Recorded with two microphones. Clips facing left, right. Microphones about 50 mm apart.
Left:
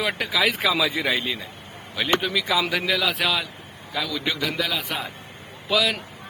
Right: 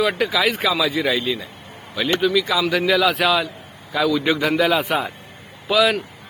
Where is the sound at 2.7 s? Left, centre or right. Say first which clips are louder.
Right 6 dB; centre.